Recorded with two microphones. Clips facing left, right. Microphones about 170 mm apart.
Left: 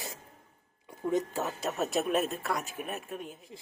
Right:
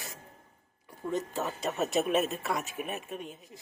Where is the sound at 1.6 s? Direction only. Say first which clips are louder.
Right 2 dB; centre (ahead or behind).